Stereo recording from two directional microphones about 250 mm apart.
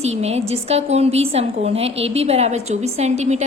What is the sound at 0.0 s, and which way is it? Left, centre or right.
A woman's voice, right.